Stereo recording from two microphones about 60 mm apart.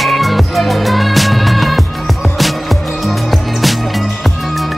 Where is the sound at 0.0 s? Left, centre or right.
Centre.